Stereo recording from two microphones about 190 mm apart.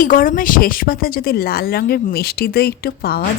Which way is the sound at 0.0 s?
45° left (ahead or behind).